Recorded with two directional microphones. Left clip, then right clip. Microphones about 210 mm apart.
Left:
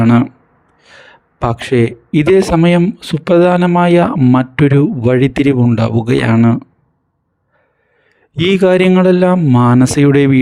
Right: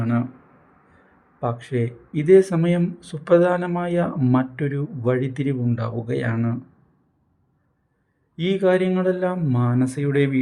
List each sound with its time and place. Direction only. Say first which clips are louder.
0.0 s speech: left 14 dB; 40° left (ahead or behind)
1.4 s speech: left 12 dB; 40° left (ahead or behind)
8.4 s speech: left 9 dB; 40° left (ahead or behind)